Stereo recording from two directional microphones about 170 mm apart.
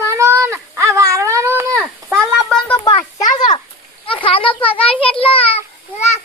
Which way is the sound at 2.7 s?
25° left (ahead or behind).